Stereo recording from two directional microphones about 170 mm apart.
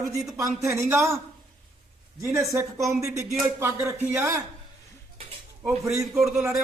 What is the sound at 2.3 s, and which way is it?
A woman's voice, 20° right (ahead or behind).